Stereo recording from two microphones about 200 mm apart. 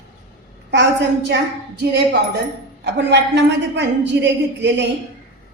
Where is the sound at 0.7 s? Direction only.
60° right (ahead or behind).